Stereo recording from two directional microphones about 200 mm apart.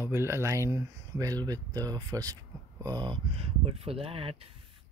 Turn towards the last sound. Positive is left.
turn(degrees=-30)  # may be behind; listen again after turning